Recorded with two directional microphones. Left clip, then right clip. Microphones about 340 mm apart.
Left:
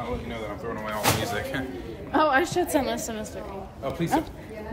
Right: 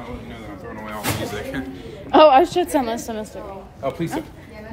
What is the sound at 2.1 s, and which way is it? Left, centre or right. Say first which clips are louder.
A woman's voice: right 10 dB; centre.